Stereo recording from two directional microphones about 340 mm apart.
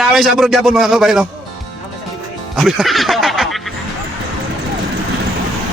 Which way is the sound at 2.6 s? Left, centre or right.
Centre.